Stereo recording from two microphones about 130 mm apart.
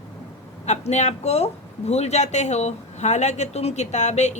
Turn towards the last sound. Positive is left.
turn(degrees=60)  # may be behind; listen again after turning